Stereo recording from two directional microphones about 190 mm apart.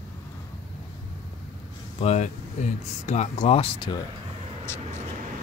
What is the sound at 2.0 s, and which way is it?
Speech, 35° left (ahead or behind).